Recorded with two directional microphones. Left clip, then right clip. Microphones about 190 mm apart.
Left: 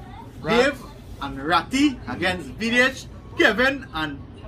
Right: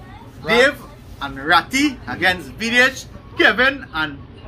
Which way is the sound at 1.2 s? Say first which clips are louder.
Right 6 dB; centre (ahead or behind).